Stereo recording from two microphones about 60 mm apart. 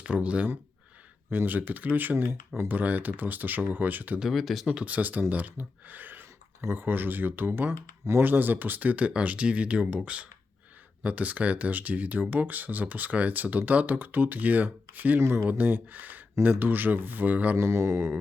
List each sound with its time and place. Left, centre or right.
0.0 s speech: right
4.2 s speech: centre
4.7 s speech: right
17.6 s mantra: right